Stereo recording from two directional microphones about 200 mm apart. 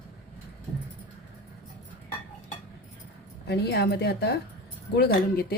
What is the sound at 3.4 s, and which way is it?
A woman's voice, 55° left (ahead or behind).